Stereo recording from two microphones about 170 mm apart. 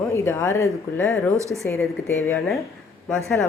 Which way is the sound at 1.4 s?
15° right (ahead or behind).